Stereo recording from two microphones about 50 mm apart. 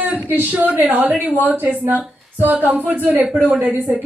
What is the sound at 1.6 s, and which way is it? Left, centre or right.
A woman's voice, right.